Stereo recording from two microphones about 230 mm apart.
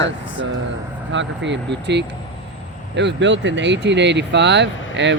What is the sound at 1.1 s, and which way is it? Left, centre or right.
Speech, right.